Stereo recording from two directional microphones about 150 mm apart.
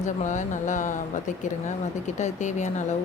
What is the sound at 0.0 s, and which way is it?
Speech, 55° left (ahead or behind).